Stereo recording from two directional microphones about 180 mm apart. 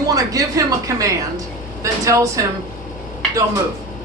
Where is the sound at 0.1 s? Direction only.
20° right (ahead or behind).